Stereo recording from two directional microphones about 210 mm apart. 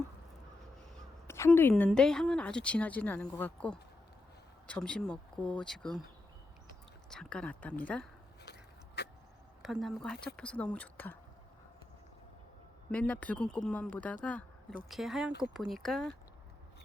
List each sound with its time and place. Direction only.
1.3 s a woman's voice: 10° left (ahead or behind)
7.1 s speech: 5° left (ahead or behind)
9.0 s a sound: 50° left (ahead or behind)
9.6 s speech: centre (ahead or behind)
12.9 s speech: 5° left (ahead or behind)